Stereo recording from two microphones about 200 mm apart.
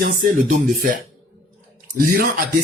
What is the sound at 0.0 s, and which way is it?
Speech, 45° right (ahead or behind).